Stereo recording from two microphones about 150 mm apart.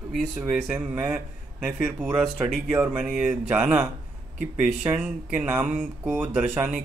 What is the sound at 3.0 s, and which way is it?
Speech, 5° right (ahead or behind).